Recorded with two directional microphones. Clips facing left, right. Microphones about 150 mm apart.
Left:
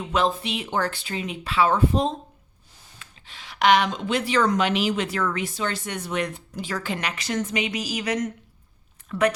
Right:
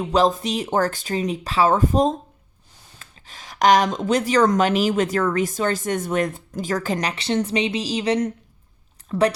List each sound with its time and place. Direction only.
0.0 s speech: 35° right (ahead or behind)